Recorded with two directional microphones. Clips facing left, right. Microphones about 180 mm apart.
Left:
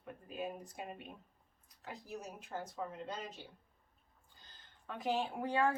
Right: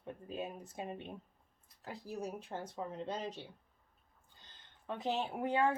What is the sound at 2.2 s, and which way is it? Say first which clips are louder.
Speech: right 3 dB; 30° right (ahead or behind).